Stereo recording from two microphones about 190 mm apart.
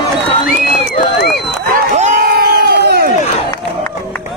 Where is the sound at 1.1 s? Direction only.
60° left (ahead or behind).